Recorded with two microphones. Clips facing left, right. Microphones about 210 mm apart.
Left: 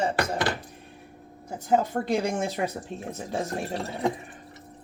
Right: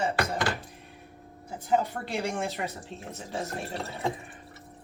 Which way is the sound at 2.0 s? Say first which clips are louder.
Left 5 dB; 15° left (ahead or behind).